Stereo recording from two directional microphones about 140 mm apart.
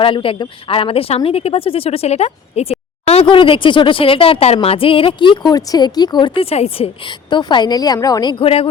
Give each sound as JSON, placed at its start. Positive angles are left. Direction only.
{"t": 0.0, "sound": "speech", "side_deg": 40}